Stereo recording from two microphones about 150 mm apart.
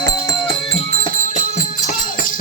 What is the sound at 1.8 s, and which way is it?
Music, 60° left (ahead or behind).